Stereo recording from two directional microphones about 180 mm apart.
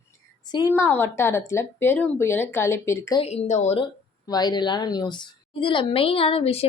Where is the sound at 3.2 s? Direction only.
35° left (ahead or behind).